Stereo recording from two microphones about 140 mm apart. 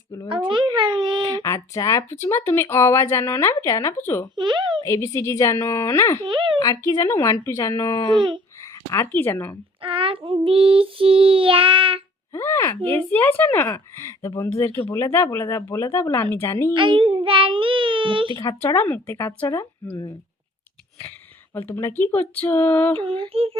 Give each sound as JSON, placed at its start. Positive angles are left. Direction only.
{"t": 0.3, "sound": "a sound", "side_deg": -35}
{"t": 1.4, "sound": "speech", "side_deg": 25}
{"t": 4.4, "sound": "child singing", "side_deg": -35}
{"t": 4.8, "sound": "speech", "side_deg": 20}
{"t": 6.2, "sound": "a sound", "side_deg": -35}
{"t": 6.6, "sound": "speech", "side_deg": 25}
{"t": 8.1, "sound": "child singing", "side_deg": -35}
{"t": 8.9, "sound": "speech", "side_deg": 15}
{"t": 9.8, "sound": "child singing", "side_deg": -40}
{"t": 12.3, "sound": "speech", "side_deg": 20}
{"t": 16.7, "sound": "child singing", "side_deg": -35}
{"t": 18.3, "sound": "speech", "side_deg": 25}
{"t": 21.5, "sound": "speech", "side_deg": 15}
{"t": 23.0, "sound": "child singing", "side_deg": -40}